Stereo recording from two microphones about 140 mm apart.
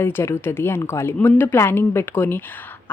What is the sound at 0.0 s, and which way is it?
Speech, 15° left (ahead or behind).